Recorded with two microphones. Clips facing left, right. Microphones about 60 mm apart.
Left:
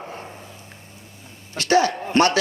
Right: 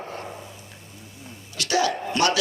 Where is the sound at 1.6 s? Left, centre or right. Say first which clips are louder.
Left 5 dB; left.